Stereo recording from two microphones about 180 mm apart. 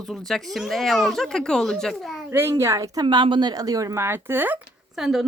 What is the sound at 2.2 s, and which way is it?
A woman's voice, 15° right (ahead or behind).